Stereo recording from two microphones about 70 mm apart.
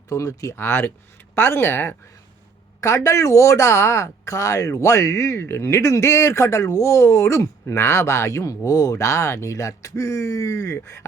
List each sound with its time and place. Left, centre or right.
0.1 s speech: left
0.5 s speech: left
2.8 s speech: left